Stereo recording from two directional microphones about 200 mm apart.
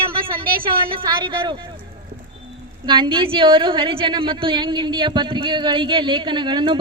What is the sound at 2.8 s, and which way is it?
A woman's voice, 25° right (ahead or behind).